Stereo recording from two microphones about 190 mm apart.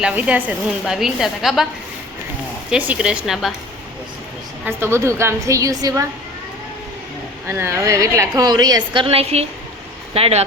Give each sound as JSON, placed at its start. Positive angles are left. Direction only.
{"t": 0.0, "sound": "speech", "side_deg": -10}
{"t": 2.6, "sound": "speech", "side_deg": -5}
{"t": 4.6, "sound": "a woman's voice", "side_deg": -15}
{"t": 7.4, "sound": "a woman's voice", "side_deg": -10}